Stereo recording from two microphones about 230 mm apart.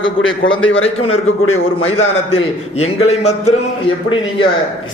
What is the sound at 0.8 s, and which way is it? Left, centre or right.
Speech, left.